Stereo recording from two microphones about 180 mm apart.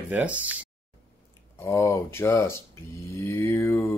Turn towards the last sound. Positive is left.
turn(degrees=15)  # may be behind; listen again after turning